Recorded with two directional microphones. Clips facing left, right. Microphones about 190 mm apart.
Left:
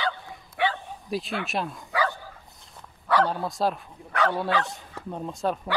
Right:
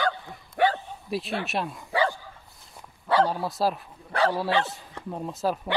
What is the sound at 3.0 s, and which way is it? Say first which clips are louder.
Bow-wow: right 1 dB; 25° right (ahead or behind).